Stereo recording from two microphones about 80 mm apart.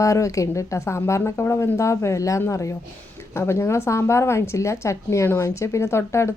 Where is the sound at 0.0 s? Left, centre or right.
Left.